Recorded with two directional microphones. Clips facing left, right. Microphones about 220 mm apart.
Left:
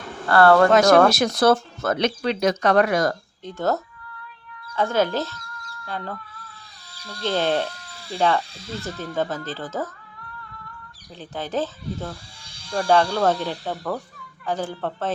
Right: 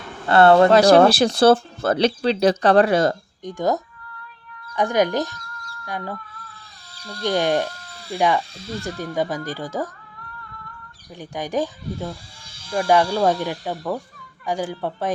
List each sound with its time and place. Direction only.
0.3 s speech: 25° right (ahead or behind)
3.4 s speech: 15° right (ahead or behind)
7.3 s speech: 15° right (ahead or behind)
11.2 s speech: 15° right (ahead or behind)